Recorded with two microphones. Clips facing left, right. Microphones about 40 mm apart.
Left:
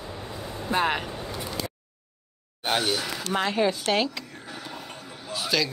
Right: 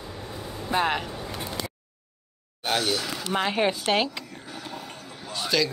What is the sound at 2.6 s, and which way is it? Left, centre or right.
Speech, centre.